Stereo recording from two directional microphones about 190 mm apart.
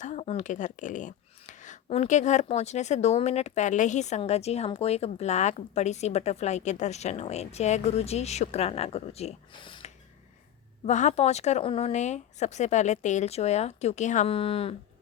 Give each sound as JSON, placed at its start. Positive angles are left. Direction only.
{"t": 0.0, "sound": "speech", "side_deg": 35}
{"t": 10.8, "sound": "speech", "side_deg": 40}